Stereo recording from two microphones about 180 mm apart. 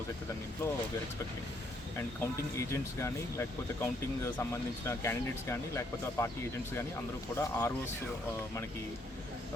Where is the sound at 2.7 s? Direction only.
15° left (ahead or behind).